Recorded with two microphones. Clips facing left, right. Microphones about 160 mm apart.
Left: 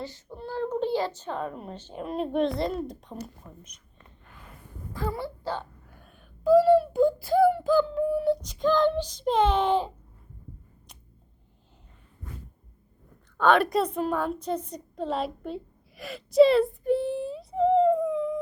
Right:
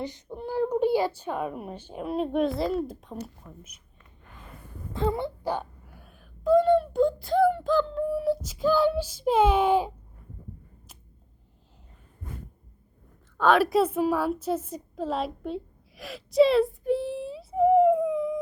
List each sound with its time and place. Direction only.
0.0 s a child's voice: 20° right (ahead or behind); by 3.2 s 5° right (ahead or behind)
3.4 s speech: 20° left (ahead or behind)
4.9 s speech: 25° right (ahead or behind)
6.1 s speech: centre (ahead or behind)
13.3 s a woman's voice: centre (ahead or behind)